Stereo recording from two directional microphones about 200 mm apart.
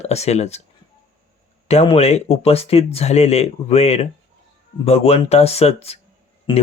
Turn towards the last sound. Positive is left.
turn(degrees=25)  # may be behind; listen again after turning